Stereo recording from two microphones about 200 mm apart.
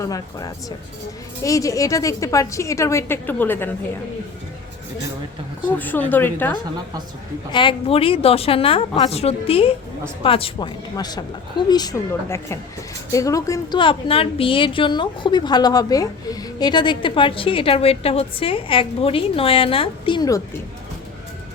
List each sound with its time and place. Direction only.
0.0 s a woman's voice: 15° left (ahead or behind)
5.6 s a woman's voice: 10° left (ahead or behind)
7.5 s a woman's voice: 25° left (ahead or behind)